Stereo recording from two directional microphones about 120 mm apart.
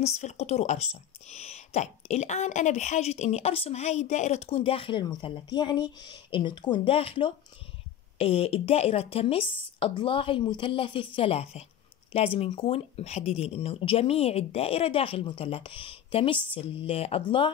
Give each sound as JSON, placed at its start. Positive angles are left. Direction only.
{"t": 0.0, "sound": "a woman's voice", "side_deg": 65}